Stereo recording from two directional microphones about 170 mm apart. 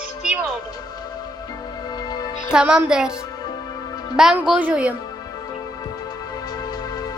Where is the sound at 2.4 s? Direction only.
5° right (ahead or behind).